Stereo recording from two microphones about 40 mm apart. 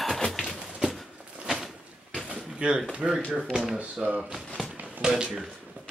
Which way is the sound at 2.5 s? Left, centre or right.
Right.